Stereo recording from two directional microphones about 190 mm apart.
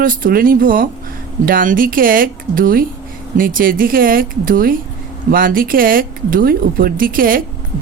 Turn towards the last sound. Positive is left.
turn(degrees=-50)  # may be behind; listen again after turning